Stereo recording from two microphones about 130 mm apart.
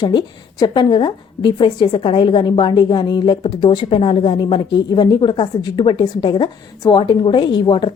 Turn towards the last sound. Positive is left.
turn(degrees=40)  # may be behind; listen again after turning